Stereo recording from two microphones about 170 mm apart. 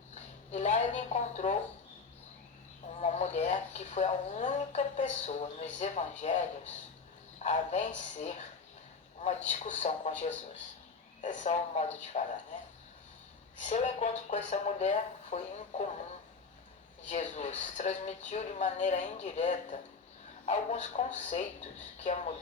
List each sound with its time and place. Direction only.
0.1 s a sound: 45° left (ahead or behind)
3.0 s speech: 40° left (ahead or behind)
7.4 s speech: 45° left (ahead or behind)
13.6 s speech: 45° left (ahead or behind)
17.1 s speech: 45° left (ahead or behind)